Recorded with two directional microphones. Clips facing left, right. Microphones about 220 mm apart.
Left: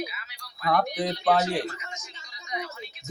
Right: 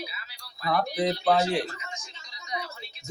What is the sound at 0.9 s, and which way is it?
Mantra, centre (ahead or behind).